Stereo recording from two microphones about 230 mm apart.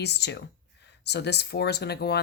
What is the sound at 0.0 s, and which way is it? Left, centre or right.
Speech, left.